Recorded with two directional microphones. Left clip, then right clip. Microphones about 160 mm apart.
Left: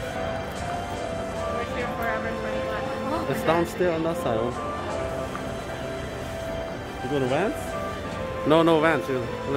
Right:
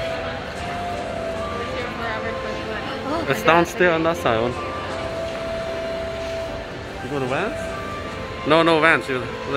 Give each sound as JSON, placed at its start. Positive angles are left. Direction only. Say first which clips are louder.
{"t": 3.4, "sound": "speech", "louder": "right 8 dB", "side_deg": 0}
{"t": 8.5, "sound": "speech", "louder": "right 4 dB", "side_deg": 15}